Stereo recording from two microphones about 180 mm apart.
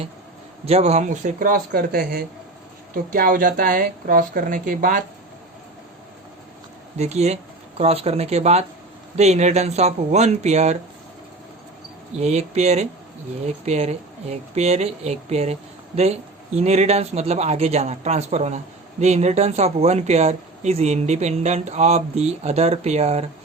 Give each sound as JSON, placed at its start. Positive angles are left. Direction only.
{"t": 0.6, "sound": "a woman's voice", "side_deg": -35}
{"t": 7.0, "sound": "speech", "side_deg": -35}
{"t": 12.1, "sound": "speech", "side_deg": -35}
{"t": 16.6, "sound": "speech", "side_deg": -35}